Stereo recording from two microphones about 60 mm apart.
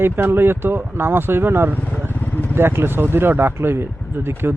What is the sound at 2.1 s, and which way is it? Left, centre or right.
Vehicle, left.